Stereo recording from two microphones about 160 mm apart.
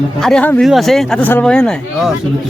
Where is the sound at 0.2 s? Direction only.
5° left (ahead or behind).